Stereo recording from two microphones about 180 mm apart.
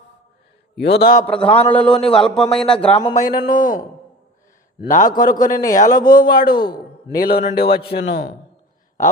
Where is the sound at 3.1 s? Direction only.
50° left (ahead or behind).